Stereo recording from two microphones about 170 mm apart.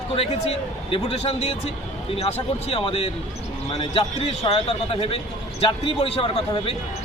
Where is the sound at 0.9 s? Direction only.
35° left (ahead or behind).